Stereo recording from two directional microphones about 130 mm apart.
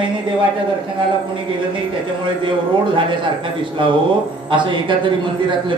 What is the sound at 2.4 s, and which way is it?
Speech, 40° right (ahead or behind).